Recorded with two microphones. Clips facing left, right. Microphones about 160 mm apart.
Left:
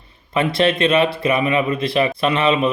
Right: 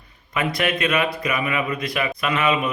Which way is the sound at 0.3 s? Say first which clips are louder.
Left 6 dB; 30° left (ahead or behind).